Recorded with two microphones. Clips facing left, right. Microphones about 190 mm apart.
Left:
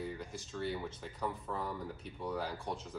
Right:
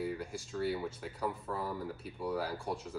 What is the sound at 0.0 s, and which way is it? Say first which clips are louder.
Speech: right 4 dB; 5° right (ahead or behind).